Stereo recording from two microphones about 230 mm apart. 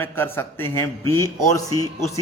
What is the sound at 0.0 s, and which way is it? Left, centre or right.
A man's voice, centre.